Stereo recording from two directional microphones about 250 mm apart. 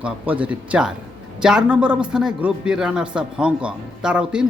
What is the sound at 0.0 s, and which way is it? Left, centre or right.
Speech, centre.